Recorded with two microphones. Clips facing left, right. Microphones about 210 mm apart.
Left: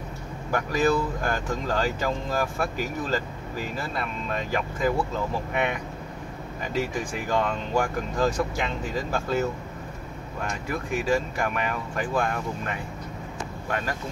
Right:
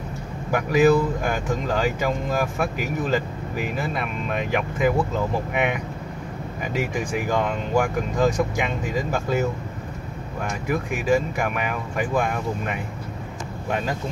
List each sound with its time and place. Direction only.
0.5 s speech: 15° right (ahead or behind)
11.1 s speech: 10° right (ahead or behind)